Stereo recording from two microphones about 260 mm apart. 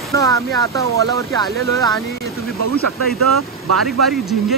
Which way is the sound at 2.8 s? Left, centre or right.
Right.